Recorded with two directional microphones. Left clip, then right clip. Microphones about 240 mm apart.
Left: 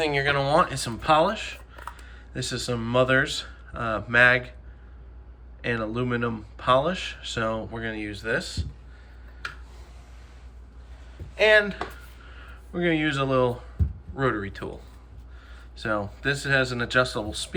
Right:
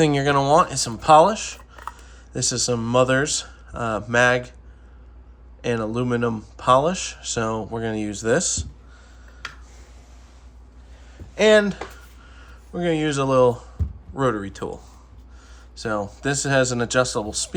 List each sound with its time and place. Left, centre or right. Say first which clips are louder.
0.2 s speech: right 4 dB; centre
5.6 s speech: right 4 dB; centre
11.5 s speech: right 2 dB; centre
12.3 s speech: right 2 dB; centre